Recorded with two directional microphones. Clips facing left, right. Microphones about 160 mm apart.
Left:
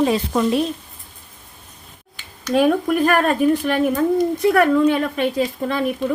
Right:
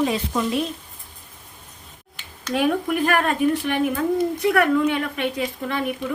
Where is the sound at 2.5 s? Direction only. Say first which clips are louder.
Left 5 dB; 40° left (ahead or behind).